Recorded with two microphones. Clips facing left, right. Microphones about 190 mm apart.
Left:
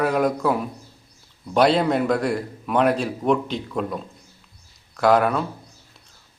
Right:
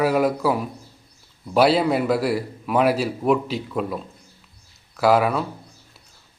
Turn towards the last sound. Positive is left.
turn(degrees=-5)  # may be behind; listen again after turning